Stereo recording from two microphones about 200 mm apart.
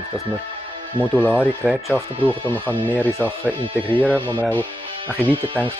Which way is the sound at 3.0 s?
10° left (ahead or behind).